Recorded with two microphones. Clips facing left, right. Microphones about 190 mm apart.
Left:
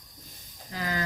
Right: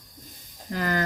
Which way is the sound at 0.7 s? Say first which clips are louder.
Right 5 dB; 60° right (ahead or behind).